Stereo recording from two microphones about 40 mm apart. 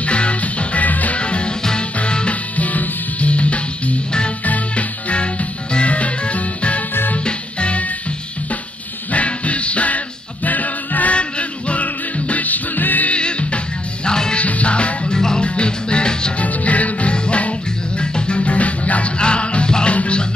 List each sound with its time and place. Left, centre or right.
0.0 s music: left
1.1 s music: left
2.5 s music: left
9.1 s music: left
11.1 s music: left
13.1 s music: left
14.4 s music: left
15.1 s music: centre
15.4 s music: left
16.3 s music: left